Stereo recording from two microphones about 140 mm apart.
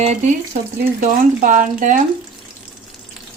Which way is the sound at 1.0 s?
75° right (ahead or behind).